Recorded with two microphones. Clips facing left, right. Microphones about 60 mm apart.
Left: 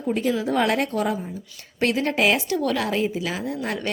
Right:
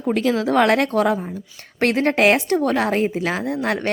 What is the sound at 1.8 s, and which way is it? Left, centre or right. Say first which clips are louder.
A woman's voice: right 4 dB; right.